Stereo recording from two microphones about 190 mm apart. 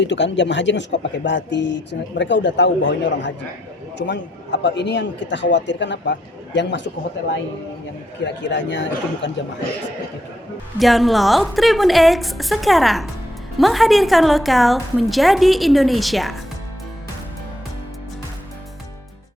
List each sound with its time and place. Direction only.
0.0 s speech: 70° left (ahead or behind)
8.4 s speech: 70° left (ahead or behind)
10.8 s a woman's voice: centre (ahead or behind)